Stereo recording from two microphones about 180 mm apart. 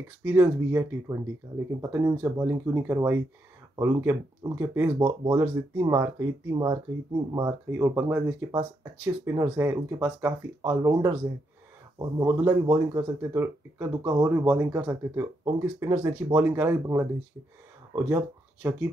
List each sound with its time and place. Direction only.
0.2 s speech: 10° right (ahead or behind)
5.0 s speech: 25° right (ahead or behind)
5.4 s speech: 15° right (ahead or behind)